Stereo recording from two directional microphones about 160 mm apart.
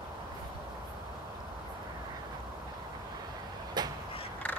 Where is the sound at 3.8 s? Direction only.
25° right (ahead or behind).